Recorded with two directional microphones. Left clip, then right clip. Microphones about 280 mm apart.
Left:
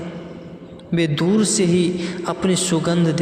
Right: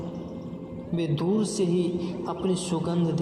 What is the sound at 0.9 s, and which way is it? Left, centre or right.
A man's voice, left.